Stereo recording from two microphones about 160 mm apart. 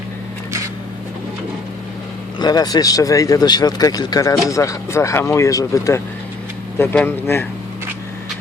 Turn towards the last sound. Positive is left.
turn(degrees=15)  # may be behind; listen again after turning